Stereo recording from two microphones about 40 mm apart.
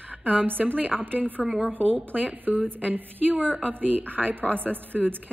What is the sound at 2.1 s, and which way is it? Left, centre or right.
A woman's voice, right.